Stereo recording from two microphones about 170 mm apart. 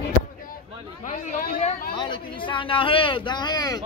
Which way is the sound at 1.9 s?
25° left (ahead or behind).